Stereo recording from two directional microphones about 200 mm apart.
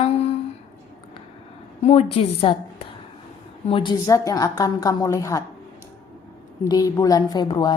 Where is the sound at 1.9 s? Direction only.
30° left (ahead or behind).